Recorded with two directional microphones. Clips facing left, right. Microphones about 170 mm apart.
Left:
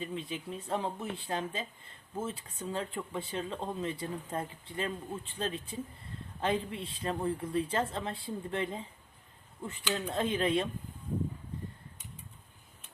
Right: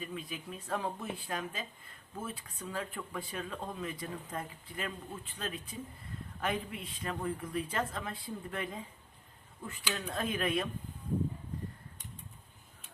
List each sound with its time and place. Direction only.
0.0 s speech: 25° left (ahead or behind)